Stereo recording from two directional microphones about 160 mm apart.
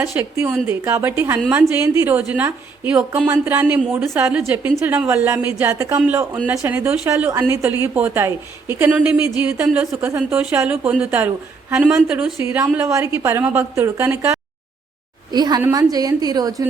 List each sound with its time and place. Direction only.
0.0 s a woman's voice: 15° right (ahead or behind)
9.6 s a woman's voice: centre (ahead or behind)
10.0 s a woman's voice: 15° right (ahead or behind)
15.3 s a woman's voice: 25° right (ahead or behind)